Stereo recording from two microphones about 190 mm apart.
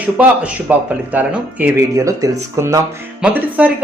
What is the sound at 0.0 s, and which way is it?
Speech, 10° right (ahead or behind).